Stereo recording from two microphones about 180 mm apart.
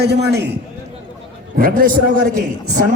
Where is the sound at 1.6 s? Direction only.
50° right (ahead or behind).